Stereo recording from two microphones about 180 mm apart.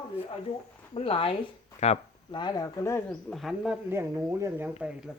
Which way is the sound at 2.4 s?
20° left (ahead or behind).